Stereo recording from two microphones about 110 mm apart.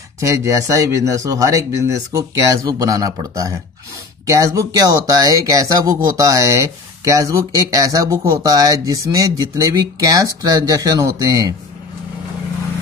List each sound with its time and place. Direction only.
0.2 s speech: 30° right (ahead or behind)